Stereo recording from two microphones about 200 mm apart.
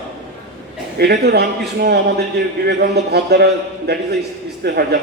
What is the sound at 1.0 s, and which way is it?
A man's voice, 55° right (ahead or behind).